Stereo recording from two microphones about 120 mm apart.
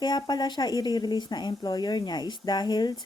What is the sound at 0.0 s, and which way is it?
Speech, 35° left (ahead or behind).